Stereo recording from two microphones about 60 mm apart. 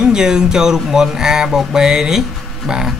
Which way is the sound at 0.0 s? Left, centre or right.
Centre.